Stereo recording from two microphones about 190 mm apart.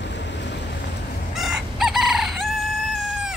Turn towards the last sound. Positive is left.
turn(degrees=-5)  # may be behind; listen again after turning